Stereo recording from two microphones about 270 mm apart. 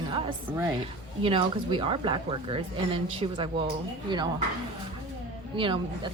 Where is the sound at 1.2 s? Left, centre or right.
Centre.